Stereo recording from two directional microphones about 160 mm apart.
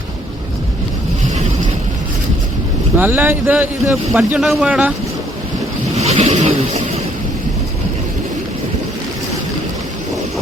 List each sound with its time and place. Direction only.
3.0 s speech: 10° right (ahead or behind)
6.0 s vehicle: 40° right (ahead or behind)